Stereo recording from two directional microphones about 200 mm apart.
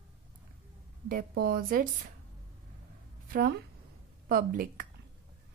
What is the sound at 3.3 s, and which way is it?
Speech, 50° right (ahead or behind).